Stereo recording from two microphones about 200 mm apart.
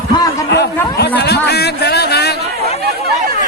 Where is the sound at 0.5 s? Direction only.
55° left (ahead or behind).